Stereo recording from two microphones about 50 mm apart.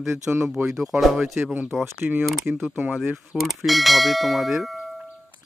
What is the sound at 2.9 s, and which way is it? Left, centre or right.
Speech, centre.